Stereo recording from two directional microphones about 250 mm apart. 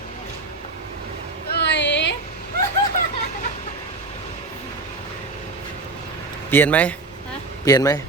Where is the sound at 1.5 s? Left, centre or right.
Left.